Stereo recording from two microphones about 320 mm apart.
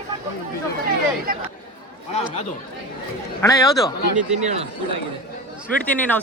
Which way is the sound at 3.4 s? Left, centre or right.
Centre.